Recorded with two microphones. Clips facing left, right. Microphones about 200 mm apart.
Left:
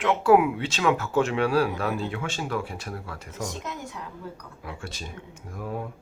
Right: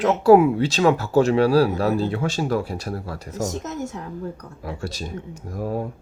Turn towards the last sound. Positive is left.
turn(degrees=-35)  # may be behind; listen again after turning